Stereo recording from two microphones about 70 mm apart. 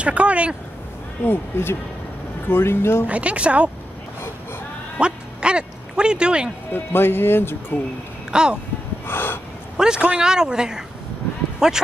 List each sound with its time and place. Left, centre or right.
0.0 s speech: centre
1.2 s speech: left
3.1 s speech: centre
4.9 s a sound: centre
6.7 s speech: left
8.3 s speech: centre
9.0 s gasp: left
9.8 s speech: centre